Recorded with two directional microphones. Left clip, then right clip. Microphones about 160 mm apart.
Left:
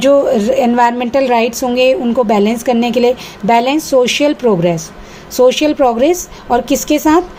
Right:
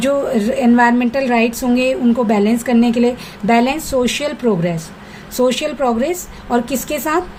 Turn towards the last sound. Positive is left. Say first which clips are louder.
# left 7 dB
turn(degrees=25)  # may be behind; listen again after turning